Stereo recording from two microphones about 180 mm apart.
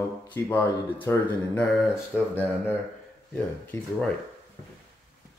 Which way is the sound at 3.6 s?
5° left (ahead or behind).